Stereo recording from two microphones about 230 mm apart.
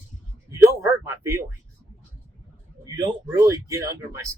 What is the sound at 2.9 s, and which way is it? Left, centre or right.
Speech, centre.